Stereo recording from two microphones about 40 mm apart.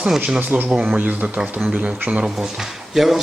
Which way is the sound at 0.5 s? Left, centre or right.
Right.